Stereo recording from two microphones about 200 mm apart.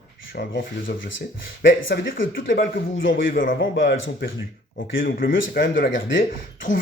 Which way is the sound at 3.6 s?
70° left (ahead or behind).